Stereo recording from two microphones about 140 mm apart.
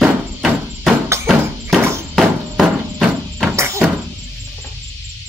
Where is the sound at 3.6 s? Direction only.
20° right (ahead or behind).